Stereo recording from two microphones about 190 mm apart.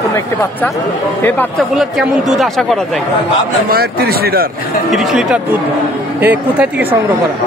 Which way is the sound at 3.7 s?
55° right (ahead or behind).